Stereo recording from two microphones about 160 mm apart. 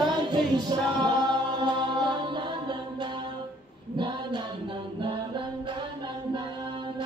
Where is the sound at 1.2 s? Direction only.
25° right (ahead or behind).